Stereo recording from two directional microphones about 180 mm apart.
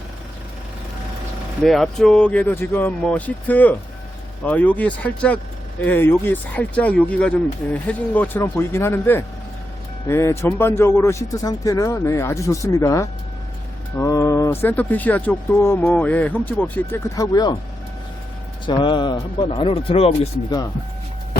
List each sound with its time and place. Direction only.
1.6 s speech: centre (ahead or behind); by 17.6 s 20° left (ahead or behind)
18.6 s speech: 25° left (ahead or behind)